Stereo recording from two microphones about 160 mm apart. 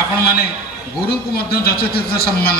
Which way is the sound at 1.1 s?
75° left (ahead or behind).